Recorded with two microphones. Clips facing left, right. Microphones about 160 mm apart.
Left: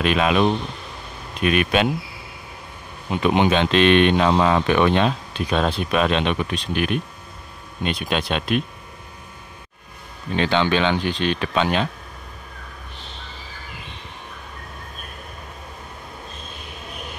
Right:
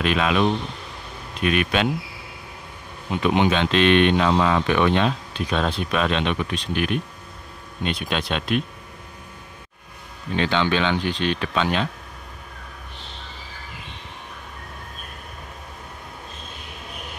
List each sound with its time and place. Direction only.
0.0 s speech: 10° left (ahead or behind)
1.4 s speech: 10° left (ahead or behind)
3.2 s speech: 20° left (ahead or behind)
3.7 s speech: 55° left (ahead or behind)
4.2 s speech: 30° left (ahead or behind)
5.5 s speech: 10° left (ahead or behind)
7.8 s speech: 10° left (ahead or behind)
10.3 s speech: 20° left (ahead or behind)